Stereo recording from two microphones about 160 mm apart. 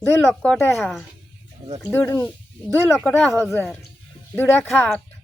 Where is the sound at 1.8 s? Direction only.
10° left (ahead or behind).